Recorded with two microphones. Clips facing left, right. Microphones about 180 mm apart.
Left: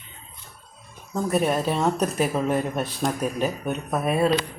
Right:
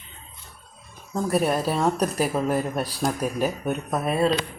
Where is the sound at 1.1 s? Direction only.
5° right (ahead or behind).